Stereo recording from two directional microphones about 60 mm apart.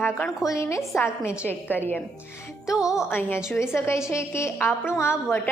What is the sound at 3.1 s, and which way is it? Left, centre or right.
A woman's voice, left.